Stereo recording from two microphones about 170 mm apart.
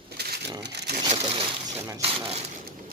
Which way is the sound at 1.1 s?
30° right (ahead or behind).